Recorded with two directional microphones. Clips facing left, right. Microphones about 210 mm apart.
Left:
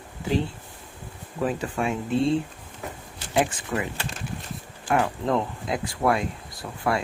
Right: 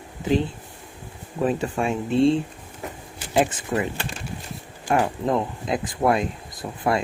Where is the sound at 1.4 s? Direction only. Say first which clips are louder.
Right 3 dB; 25° right (ahead or behind).